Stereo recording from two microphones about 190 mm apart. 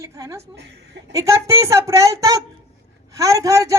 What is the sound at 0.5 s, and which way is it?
Speech, 70° right (ahead or behind).